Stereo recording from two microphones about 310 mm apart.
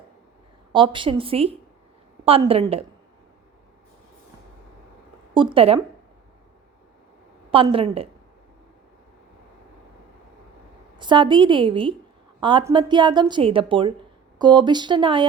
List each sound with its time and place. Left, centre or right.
0.7 s a woman's voice: centre
5.3 s a woman's voice: centre
7.5 s a woman's voice: centre
10.9 s a woman's voice: centre